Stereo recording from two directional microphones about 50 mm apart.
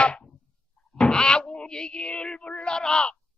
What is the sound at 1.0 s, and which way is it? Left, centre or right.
Wail, centre.